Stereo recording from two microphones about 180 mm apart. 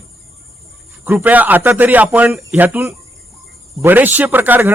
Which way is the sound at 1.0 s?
10° right (ahead or behind).